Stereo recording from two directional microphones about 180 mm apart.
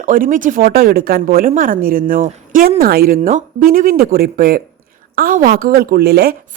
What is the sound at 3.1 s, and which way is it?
A woman's voice, 45° right (ahead or behind).